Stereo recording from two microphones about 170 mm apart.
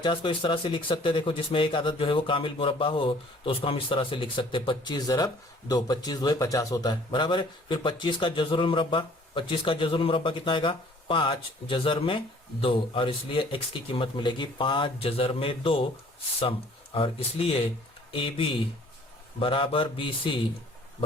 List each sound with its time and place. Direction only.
0.0 s speech: 30° left (ahead or behind)